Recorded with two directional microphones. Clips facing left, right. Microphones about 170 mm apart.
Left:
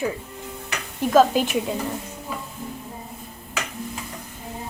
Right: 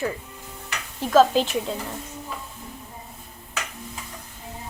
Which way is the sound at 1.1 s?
10° left (ahead or behind).